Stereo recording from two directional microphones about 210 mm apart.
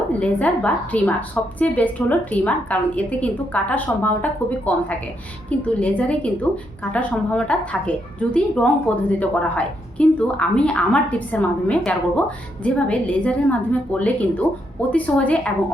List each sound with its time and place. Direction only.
0.1 s a woman's voice: 5° left (ahead or behind)